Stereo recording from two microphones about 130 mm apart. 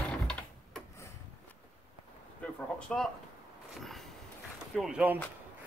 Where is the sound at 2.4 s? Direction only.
10° left (ahead or behind).